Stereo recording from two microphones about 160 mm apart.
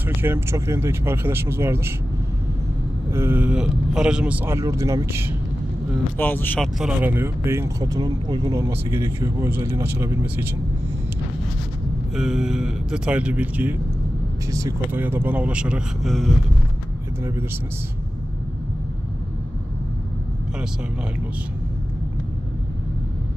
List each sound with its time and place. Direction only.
0.0 s speech: 15° right (ahead or behind)
3.1 s speech: 15° right (ahead or behind)
6.1 s speech: 10° left (ahead or behind)
6.8 s speech: 10° right (ahead or behind)
12.2 s speech: 5° right (ahead or behind)